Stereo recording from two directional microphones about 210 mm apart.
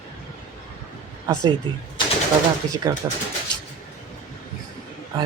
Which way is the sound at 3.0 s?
20° right (ahead or behind).